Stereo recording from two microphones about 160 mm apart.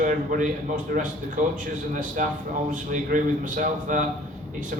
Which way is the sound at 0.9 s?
70° right (ahead or behind).